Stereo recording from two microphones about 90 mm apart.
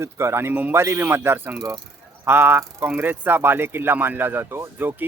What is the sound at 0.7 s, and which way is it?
Speech, 30° right (ahead or behind).